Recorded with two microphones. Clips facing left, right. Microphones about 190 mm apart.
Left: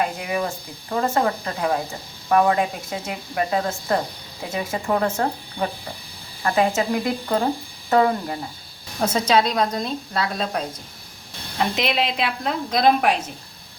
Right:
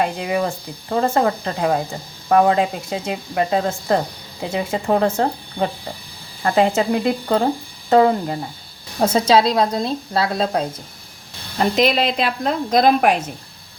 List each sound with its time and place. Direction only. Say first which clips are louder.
0.0 s a woman's voice: right 4 dB; 30° right (ahead or behind)
11.5 s a woman's voice: right 5 dB; 40° right (ahead or behind)